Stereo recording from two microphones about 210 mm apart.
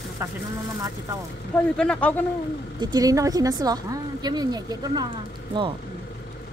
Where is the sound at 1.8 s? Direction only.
5° left (ahead or behind).